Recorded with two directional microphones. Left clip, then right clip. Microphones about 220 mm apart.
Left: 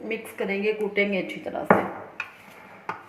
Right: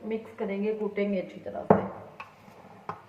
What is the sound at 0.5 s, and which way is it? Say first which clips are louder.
Speech: left 6 dB; 45° left (ahead or behind).